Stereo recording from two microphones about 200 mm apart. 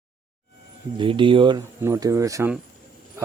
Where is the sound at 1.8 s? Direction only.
15° right (ahead or behind).